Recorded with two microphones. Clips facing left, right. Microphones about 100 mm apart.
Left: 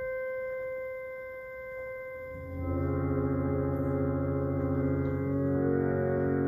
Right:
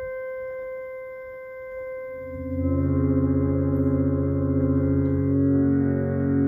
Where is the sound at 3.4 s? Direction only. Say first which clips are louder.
Right 7 dB; 10° right (ahead or behind).